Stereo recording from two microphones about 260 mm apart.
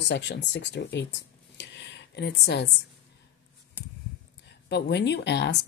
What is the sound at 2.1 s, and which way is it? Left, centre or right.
Speech, left.